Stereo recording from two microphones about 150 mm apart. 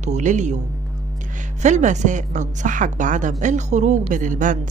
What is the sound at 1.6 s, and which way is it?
A woman's voice, 55° right (ahead or behind).